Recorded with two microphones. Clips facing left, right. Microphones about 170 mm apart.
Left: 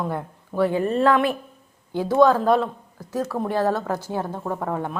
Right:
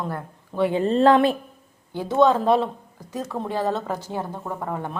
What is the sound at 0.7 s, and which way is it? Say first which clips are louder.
Speech: right 4 dB; 25° right (ahead or behind).